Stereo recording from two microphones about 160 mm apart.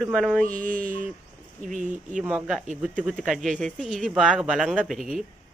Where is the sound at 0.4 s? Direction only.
55° right (ahead or behind).